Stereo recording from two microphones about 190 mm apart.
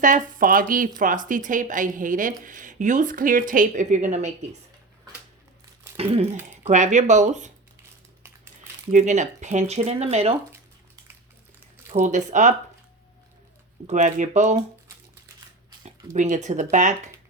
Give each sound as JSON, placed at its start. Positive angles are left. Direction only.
{"t": 0.0, "sound": "speech", "side_deg": -45}
{"t": 6.6, "sound": "speech", "side_deg": -40}
{"t": 8.9, "sound": "speech", "side_deg": -40}
{"t": 11.9, "sound": "speech", "side_deg": -40}
{"t": 13.8, "sound": "speech", "side_deg": -40}
{"t": 16.1, "sound": "speech", "side_deg": -40}